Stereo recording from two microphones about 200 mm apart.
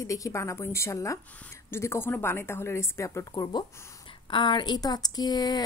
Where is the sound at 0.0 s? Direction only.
15° left (ahead or behind).